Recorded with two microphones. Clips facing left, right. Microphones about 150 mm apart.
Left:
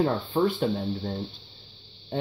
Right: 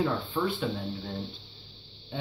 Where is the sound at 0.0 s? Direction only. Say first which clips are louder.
Left 5 dB; 40° left (ahead or behind).